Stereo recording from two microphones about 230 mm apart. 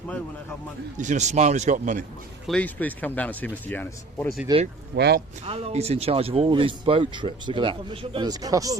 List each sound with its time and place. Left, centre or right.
0.9 s a man's voice: right
2.5 s speech: centre
4.5 s speech: centre
4.9 s speech: right
5.5 s speech: right